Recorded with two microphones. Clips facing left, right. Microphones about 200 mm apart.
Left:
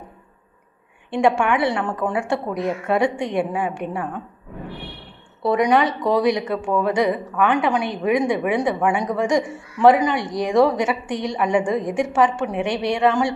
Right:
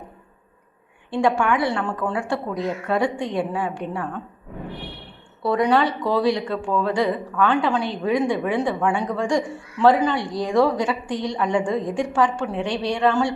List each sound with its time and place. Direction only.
1.1 s a woman's voice: 25° left (ahead or behind)
5.4 s a woman's voice: 20° left (ahead or behind)